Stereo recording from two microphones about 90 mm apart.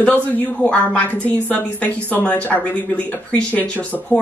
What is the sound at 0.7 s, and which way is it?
A woman's voice, 15° left (ahead or behind).